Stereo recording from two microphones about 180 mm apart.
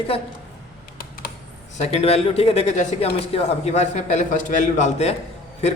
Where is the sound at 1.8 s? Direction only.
35° left (ahead or behind).